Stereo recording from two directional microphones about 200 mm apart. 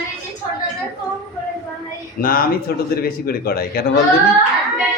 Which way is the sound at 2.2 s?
45° left (ahead or behind).